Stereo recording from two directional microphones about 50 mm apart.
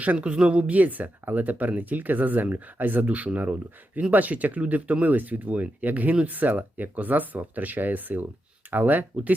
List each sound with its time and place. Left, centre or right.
0.0 s speech: right